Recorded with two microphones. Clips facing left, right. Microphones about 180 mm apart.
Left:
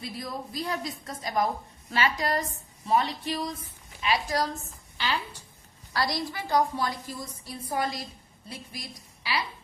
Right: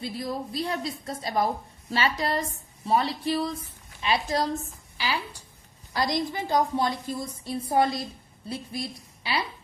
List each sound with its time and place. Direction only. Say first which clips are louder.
0.0 s a woman's voice: right 4 dB; 30° right (ahead or behind)
4.9 s a woman's voice: right 1 dB; 10° right (ahead or behind); by 9.4 s 30° right (ahead or behind)